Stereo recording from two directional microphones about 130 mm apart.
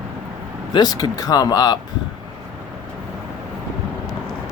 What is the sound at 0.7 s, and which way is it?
Speech, 30° left (ahead or behind).